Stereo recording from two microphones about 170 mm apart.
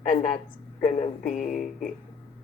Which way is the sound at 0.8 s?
50° left (ahead or behind).